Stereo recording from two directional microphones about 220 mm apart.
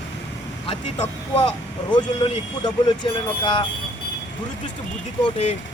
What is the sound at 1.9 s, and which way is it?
Speech, 20° left (ahead or behind).